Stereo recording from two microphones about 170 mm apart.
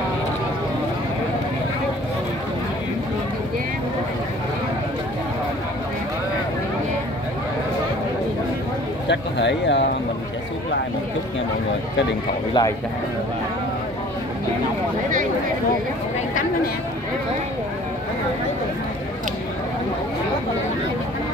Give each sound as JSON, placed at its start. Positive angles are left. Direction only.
{"t": 9.0, "sound": "speech", "side_deg": 90}
{"t": 12.6, "sound": "speech", "side_deg": 25}